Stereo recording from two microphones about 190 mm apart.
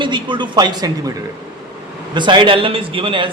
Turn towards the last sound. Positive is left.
turn(degrees=-30)  # may be behind; listen again after turning